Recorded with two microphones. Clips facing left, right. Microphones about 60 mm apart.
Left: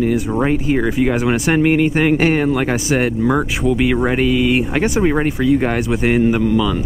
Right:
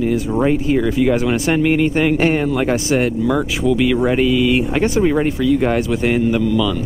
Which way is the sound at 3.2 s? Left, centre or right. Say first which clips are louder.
Even; left.